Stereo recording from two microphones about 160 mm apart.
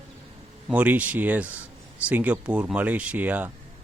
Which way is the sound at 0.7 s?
10° right (ahead or behind).